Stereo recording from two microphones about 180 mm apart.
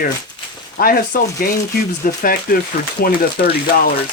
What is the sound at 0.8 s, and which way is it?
Speech, 55° left (ahead or behind).